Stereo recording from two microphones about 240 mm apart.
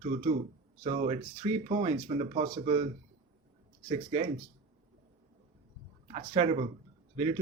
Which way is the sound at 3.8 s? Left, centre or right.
Right.